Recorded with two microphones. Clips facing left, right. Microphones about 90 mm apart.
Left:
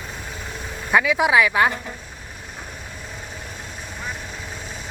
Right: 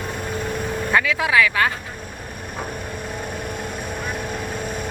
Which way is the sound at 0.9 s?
15° left (ahead or behind).